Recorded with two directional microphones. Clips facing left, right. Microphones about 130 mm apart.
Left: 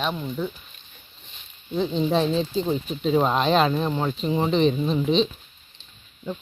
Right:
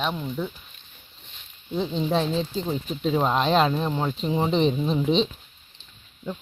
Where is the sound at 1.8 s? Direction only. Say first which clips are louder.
Left 2 dB; centre (ahead or behind).